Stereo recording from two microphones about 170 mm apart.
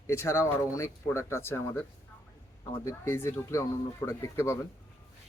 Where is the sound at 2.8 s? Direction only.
15° left (ahead or behind).